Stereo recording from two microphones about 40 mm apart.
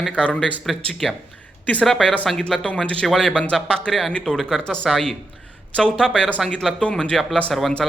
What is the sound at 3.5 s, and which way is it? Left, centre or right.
Speech, left.